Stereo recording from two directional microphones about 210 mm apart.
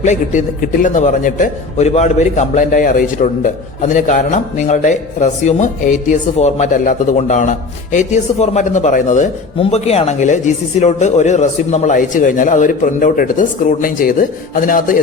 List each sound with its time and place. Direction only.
0.0 s a man's voice: 35° left (ahead or behind)